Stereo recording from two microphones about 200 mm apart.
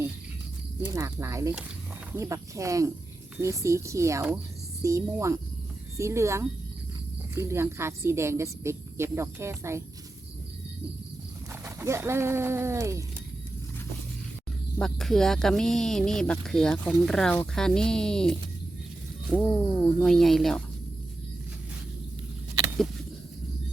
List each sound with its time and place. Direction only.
0.8 s a woman's voice: 15° right (ahead or behind)
11.6 s a woman's voice: 15° right (ahead or behind)
14.8 s speech: centre (ahead or behind)
20.1 s speech: centre (ahead or behind)